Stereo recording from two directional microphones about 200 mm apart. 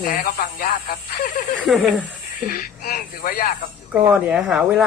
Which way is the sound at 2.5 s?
45° left (ahead or behind).